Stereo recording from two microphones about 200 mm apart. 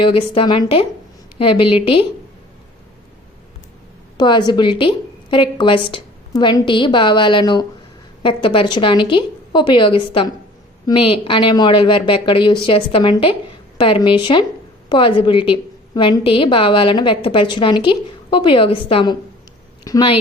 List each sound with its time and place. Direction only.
0.0 s a woman's voice: 25° left (ahead or behind)
4.2 s a woman's voice: 20° left (ahead or behind)